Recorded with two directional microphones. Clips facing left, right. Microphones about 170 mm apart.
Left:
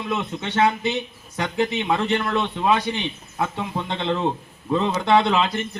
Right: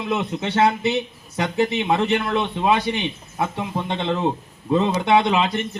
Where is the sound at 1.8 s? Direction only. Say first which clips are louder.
Right 2 dB; 20° right (ahead or behind).